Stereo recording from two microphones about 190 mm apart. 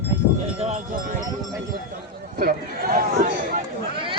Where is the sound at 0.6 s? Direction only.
35° right (ahead or behind).